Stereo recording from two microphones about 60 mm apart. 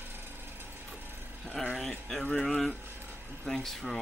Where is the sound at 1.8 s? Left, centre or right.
Centre.